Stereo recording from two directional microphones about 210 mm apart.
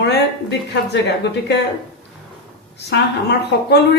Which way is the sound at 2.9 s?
50° left (ahead or behind).